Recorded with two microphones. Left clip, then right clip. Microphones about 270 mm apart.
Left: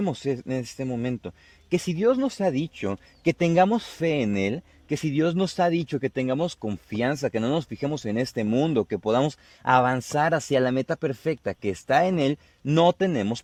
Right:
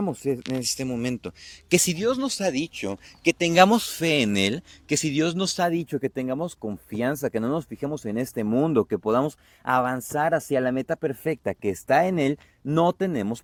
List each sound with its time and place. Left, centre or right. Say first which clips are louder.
0.0 s speech: right 1 dB; centre
1.7 s speech: right 5 dB; centre
2.0 s speech: left 2 dB; left
4.0 s speech: even; centre
8.7 s speech: right 2 dB; centre
9.0 s speech: left 3 dB; centre
9.6 s speech: left 3 dB; left
11.2 s speech: right 1 dB; centre